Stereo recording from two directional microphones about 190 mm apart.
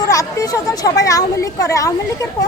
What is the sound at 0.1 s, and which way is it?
Speech, 15° left (ahead or behind).